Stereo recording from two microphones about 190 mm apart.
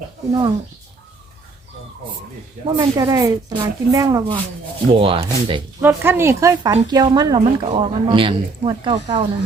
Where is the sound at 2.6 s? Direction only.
25° right (ahead or behind).